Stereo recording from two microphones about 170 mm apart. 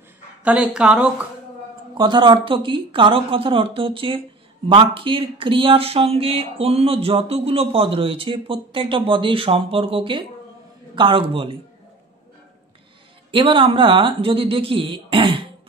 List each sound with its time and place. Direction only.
0.4 s speech: 5° right (ahead or behind)
2.0 s speech: 25° right (ahead or behind)
13.3 s speech: 30° right (ahead or behind)